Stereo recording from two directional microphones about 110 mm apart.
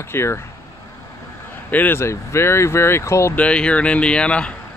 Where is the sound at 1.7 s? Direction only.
15° left (ahead or behind).